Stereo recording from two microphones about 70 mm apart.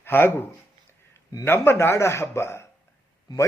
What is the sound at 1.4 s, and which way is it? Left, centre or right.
Speech, left.